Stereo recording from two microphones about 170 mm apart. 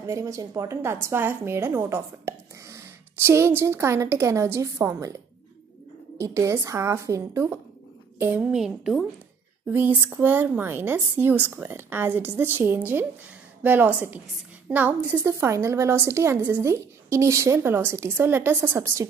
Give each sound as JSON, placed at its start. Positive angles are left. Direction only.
{"t": 0.0, "sound": "a woman's voice", "side_deg": -20}
{"t": 6.1, "sound": "a woman's voice", "side_deg": -15}